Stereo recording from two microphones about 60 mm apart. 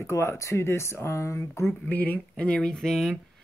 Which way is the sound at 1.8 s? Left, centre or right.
Left.